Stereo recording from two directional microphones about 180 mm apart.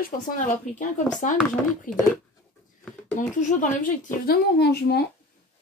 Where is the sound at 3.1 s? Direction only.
45° left (ahead or behind).